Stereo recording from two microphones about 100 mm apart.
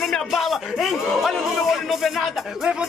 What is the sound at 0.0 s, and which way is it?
Speech, centre (ahead or behind).